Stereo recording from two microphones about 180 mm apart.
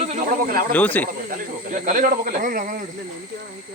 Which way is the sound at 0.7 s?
10° left (ahead or behind).